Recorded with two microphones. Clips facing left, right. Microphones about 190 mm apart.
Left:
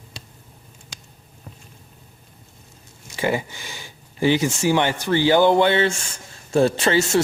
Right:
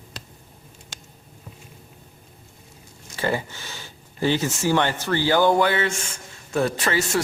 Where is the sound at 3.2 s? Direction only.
15° left (ahead or behind).